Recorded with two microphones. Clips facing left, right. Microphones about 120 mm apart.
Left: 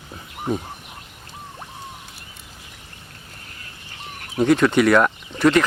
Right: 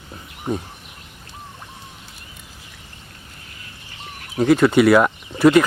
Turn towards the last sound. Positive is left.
turn(degrees=-10)  # may be behind; listen again after turning